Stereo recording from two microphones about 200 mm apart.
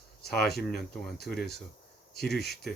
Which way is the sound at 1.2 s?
50° left (ahead or behind).